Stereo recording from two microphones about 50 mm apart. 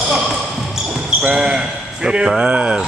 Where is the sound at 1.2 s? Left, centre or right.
Centre.